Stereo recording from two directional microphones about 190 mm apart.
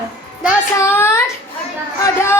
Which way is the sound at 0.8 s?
10° left (ahead or behind).